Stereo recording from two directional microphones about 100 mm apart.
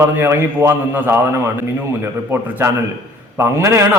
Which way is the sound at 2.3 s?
20° right (ahead or behind).